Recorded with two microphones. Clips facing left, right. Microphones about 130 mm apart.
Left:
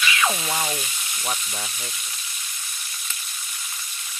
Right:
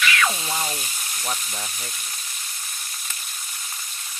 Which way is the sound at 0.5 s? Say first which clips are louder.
Left 1 dB; 15° left (ahead or behind).